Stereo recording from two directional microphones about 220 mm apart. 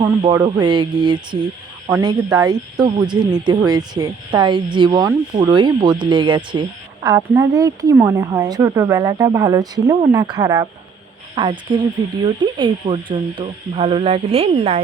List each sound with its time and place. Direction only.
0.0 s speech: 20° right (ahead or behind)